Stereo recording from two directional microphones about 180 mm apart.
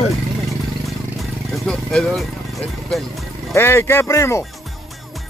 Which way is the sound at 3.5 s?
15° left (ahead or behind).